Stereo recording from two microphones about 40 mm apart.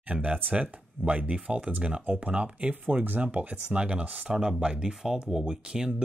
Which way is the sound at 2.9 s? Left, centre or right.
Right.